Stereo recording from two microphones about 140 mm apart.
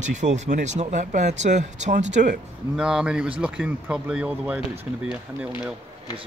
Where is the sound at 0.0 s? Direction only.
60° right (ahead or behind).